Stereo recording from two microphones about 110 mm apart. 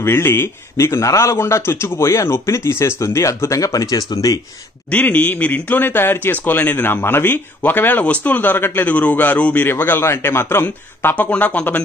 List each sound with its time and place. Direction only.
0.0 s a man's voice: 20° left (ahead or behind)
4.9 s speech: 15° left (ahead or behind)